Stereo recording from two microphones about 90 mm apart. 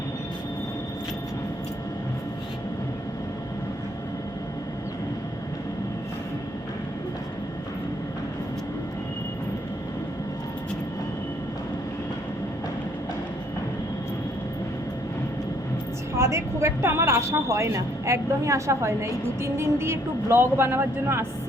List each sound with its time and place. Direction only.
16.1 s speech: 30° right (ahead or behind)